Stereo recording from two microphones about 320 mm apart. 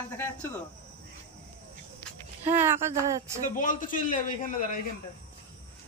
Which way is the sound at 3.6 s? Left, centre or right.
Left.